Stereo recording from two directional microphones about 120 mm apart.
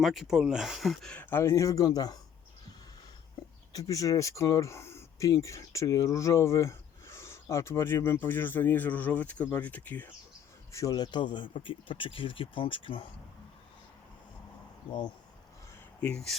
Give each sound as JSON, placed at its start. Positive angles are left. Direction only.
{"t": 0.0, "sound": "speech", "side_deg": 0}
{"t": 1.1, "sound": "speech", "side_deg": 15}
{"t": 3.7, "sound": "speech", "side_deg": 30}
{"t": 10.7, "sound": "speech", "side_deg": 25}
{"t": 16.0, "sound": "speech", "side_deg": 10}